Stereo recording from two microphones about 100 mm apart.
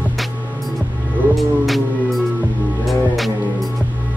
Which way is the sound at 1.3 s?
Centre (ahead or behind).